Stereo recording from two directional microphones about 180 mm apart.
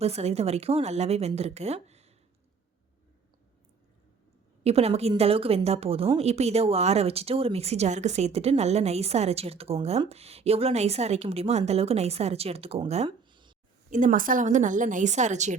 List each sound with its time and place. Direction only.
0.0 s a woman's voice: 35° right (ahead or behind)
4.6 s a woman's voice: 35° right (ahead or behind)
13.2 s a sound: 25° right (ahead or behind)
13.9 s a woman's voice: 45° right (ahead or behind)